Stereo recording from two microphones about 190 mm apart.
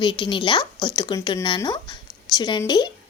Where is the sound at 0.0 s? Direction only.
25° left (ahead or behind).